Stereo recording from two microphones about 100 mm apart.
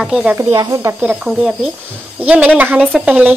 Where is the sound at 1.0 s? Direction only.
10° right (ahead or behind).